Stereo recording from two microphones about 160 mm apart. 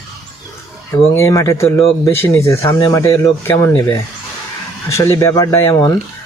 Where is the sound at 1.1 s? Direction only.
15° left (ahead or behind).